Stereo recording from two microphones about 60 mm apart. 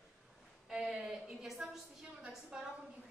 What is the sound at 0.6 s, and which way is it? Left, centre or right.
A woman's voice, centre.